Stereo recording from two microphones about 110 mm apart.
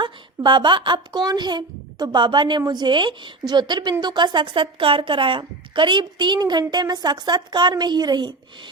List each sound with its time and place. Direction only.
0.0 s a woman's voice: 45° right (ahead or behind)